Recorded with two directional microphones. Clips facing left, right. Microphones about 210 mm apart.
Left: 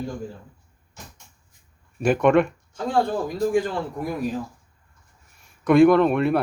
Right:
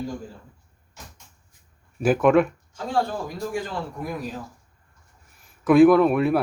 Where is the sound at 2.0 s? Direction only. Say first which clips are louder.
Even; centre (ahead or behind).